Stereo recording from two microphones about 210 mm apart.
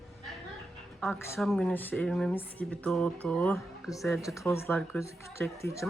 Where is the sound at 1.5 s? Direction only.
5° left (ahead or behind).